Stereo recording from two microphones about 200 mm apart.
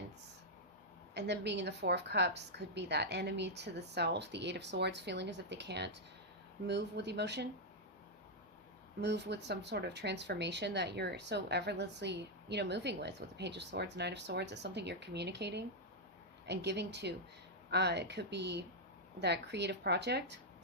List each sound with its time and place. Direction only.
1.1 s speech: 60° right (ahead or behind)
9.0 s speech: 60° right (ahead or behind)